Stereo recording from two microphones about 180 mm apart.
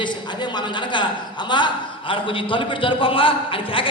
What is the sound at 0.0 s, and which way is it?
A man's voice, 25° left (ahead or behind).